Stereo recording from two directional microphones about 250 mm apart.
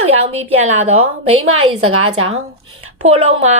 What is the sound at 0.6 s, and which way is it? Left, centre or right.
A woman's voice, right.